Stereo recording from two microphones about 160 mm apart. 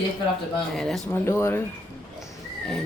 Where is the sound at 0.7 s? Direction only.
Centre (ahead or behind).